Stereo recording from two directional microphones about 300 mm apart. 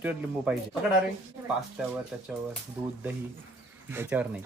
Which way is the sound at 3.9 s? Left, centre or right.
Centre.